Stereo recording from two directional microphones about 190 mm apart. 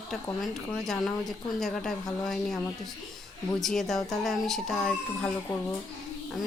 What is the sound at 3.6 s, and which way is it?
Speech, centre (ahead or behind).